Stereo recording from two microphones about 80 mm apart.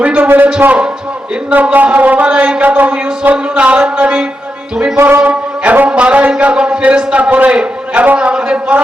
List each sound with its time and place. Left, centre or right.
0.0 s speech: centre
4.9 s a man's voice: right